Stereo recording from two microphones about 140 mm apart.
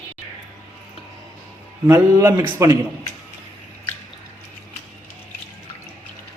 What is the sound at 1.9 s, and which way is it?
Speech, 20° right (ahead or behind).